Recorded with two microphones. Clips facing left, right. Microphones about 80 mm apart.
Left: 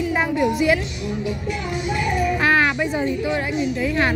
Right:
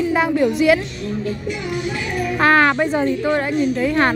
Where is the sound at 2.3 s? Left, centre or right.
Right.